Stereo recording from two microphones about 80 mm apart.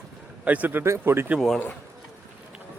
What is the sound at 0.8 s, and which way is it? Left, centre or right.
Speech, right.